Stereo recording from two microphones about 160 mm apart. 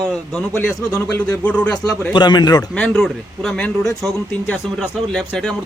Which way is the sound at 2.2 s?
25° left (ahead or behind).